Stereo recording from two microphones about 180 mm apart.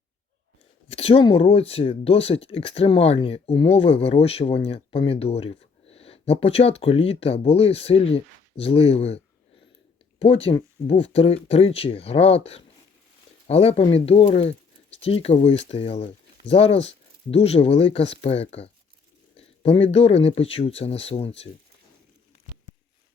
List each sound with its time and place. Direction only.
0.9 s speech: 30° left (ahead or behind)